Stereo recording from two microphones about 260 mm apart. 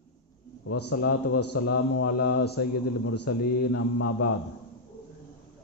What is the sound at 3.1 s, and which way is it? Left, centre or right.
A man's voice, left.